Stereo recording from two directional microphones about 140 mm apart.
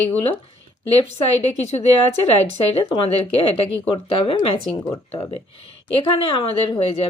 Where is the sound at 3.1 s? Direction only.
45° left (ahead or behind).